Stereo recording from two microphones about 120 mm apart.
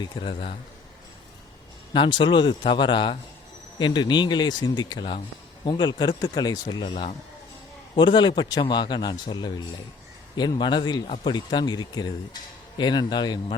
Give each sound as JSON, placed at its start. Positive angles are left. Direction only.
{"t": 0.0, "sound": "a man's voice", "side_deg": 45}
{"t": 1.9, "sound": "speech", "side_deg": 40}
{"t": 11.0, "sound": "a man's voice", "side_deg": 50}
{"t": 11.3, "sound": "speech", "side_deg": 35}